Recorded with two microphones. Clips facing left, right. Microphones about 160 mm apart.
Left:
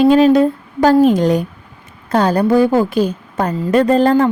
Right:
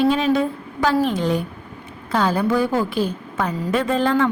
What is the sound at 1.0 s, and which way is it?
A woman's voice, 40° left (ahead or behind).